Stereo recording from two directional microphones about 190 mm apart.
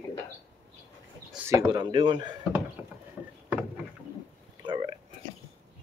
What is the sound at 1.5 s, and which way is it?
Speech, 20° right (ahead or behind).